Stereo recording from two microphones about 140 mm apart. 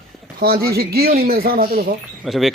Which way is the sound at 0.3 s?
90° right.